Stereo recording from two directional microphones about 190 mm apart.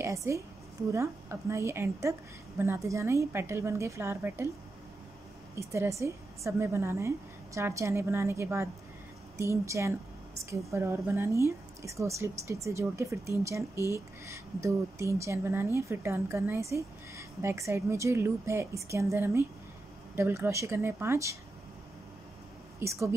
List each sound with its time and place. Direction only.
0.0 s a woman's voice: 15° right (ahead or behind)
5.6 s a woman's voice: 15° right (ahead or behind)
22.8 s a woman's voice: 15° right (ahead or behind)